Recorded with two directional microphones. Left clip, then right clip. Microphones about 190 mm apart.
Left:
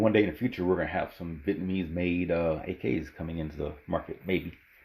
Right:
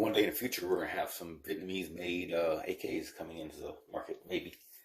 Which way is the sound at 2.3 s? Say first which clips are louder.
Left 3 dB; 5° right (ahead or behind).